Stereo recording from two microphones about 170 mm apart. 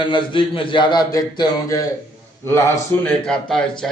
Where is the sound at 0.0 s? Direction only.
30° left (ahead or behind).